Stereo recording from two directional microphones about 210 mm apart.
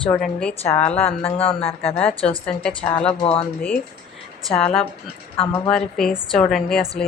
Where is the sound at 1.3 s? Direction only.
30° left (ahead or behind).